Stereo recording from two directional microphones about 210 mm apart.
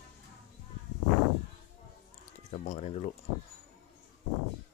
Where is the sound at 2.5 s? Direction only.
30° left (ahead or behind).